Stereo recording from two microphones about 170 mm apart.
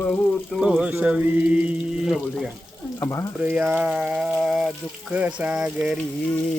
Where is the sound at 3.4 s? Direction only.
10° right (ahead or behind).